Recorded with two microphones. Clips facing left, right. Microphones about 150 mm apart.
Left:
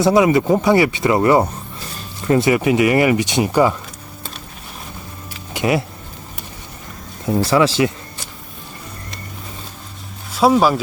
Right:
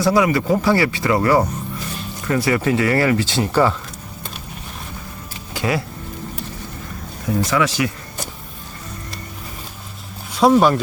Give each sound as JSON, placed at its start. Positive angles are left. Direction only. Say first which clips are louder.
{"t": 0.0, "sound": "speech", "louder": "left 3 dB", "side_deg": 25}
{"t": 5.5, "sound": "speech", "louder": "left 3 dB", "side_deg": 20}
{"t": 7.4, "sound": "speech", "louder": "left 5 dB", "side_deg": 30}
{"t": 10.3, "sound": "speech", "louder": "even", "side_deg": 5}